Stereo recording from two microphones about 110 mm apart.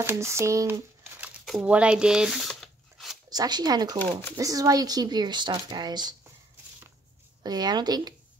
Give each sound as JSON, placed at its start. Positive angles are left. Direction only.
{"t": 0.0, "sound": "speech", "side_deg": -25}
{"t": 1.4, "sound": "crumpling", "side_deg": 0}
{"t": 1.7, "sound": "a sound", "side_deg": -10}
{"t": 3.3, "sound": "speech", "side_deg": -40}
{"t": 7.4, "sound": "speech", "side_deg": -40}